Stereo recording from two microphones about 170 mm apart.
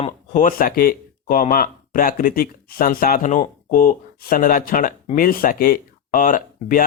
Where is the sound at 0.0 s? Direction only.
50° left (ahead or behind).